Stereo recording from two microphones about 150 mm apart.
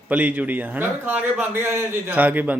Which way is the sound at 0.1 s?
10° right (ahead or behind).